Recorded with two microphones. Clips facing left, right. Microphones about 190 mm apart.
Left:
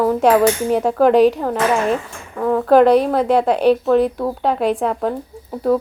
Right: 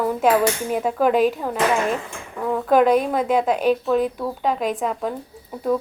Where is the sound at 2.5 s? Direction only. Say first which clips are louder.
Left 5 dB; 35° left (ahead or behind).